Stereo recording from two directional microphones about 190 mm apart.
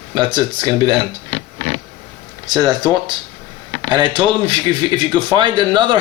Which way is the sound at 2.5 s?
20° right (ahead or behind).